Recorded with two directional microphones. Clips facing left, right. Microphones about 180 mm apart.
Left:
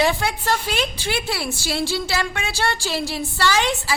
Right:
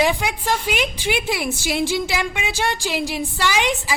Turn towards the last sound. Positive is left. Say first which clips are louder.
# even
turn(degrees=-15)  # may be behind; listen again after turning